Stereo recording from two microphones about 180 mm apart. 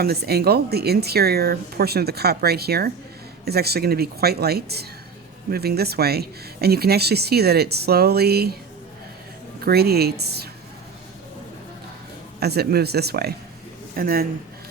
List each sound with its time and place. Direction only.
0.0 s speech: 60° right (ahead or behind)
9.6 s speech: 60° right (ahead or behind)
12.4 s speech: 60° right (ahead or behind)